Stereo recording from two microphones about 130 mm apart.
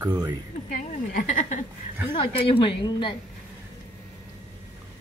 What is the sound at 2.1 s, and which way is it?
A woman's voice, 40° left (ahead or behind).